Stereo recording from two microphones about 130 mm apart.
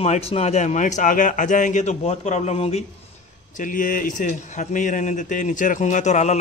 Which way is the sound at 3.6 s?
90° left.